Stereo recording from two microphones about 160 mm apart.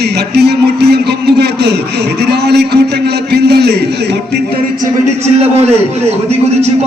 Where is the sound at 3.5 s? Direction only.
90° right.